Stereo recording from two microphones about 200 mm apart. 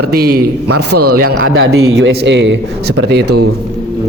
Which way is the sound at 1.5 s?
80° right.